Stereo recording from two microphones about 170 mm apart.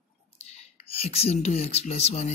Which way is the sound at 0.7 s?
35° left (ahead or behind).